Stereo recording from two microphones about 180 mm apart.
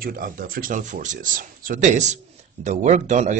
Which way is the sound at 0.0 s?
50° right (ahead or behind).